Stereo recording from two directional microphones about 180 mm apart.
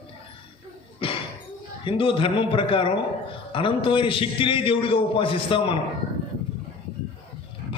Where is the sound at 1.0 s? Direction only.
30° left (ahead or behind).